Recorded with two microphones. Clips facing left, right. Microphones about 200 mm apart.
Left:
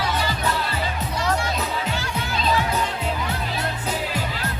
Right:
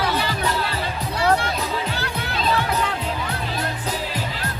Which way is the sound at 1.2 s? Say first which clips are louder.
Right 5 dB; 60° right (ahead or behind).